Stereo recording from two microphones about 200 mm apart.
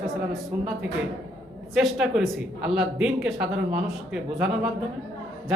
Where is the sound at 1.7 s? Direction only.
Centre (ahead or behind).